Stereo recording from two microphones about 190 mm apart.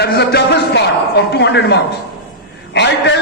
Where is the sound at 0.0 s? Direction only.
60° left (ahead or behind).